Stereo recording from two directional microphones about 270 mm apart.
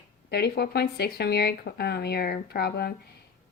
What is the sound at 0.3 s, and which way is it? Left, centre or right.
Speech, left.